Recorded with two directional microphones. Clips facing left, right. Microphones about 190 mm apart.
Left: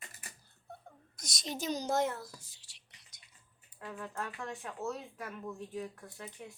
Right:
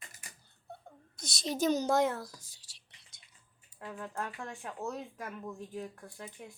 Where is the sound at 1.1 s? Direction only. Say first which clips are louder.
Right 7 dB; 30° right (ahead or behind).